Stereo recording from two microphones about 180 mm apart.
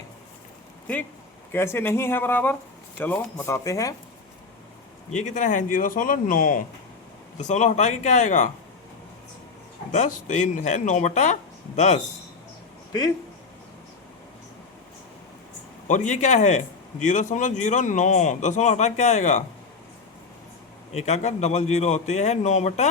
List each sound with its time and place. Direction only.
1.5 s speech: 15° left (ahead or behind)
5.2 s speech: 45° left (ahead or behind)
9.9 s speech: 45° left (ahead or behind)
15.9 s speech: 40° left (ahead or behind)
20.9 s speech: 40° left (ahead or behind)